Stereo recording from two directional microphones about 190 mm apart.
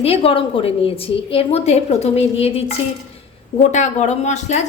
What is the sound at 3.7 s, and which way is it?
Speech, 40° left (ahead or behind).